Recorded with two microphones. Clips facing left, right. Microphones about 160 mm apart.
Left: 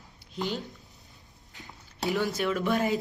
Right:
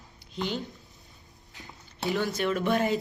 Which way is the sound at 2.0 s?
Centre (ahead or behind).